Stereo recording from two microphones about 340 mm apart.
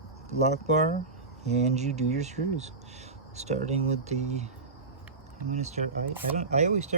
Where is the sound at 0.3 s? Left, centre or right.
Centre.